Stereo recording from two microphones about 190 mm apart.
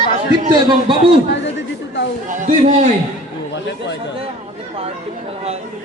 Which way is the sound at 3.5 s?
65° left (ahead or behind).